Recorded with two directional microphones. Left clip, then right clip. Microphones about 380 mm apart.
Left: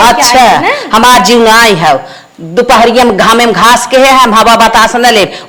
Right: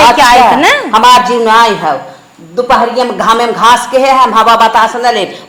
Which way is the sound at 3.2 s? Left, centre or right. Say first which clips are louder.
Left 3 dB; left.